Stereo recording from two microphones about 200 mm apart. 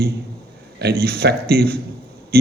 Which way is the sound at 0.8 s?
55° right (ahead or behind).